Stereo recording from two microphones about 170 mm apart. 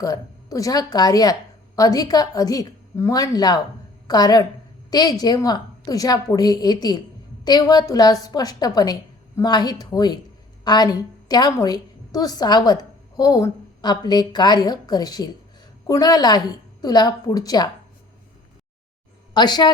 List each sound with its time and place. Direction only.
0.0 s a woman's voice: 20° left (ahead or behind)
19.3 s speech: 25° left (ahead or behind)